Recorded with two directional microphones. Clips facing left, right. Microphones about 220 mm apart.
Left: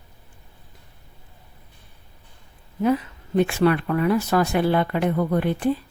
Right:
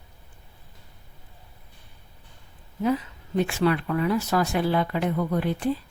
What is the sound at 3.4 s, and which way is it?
Speech, 60° left (ahead or behind).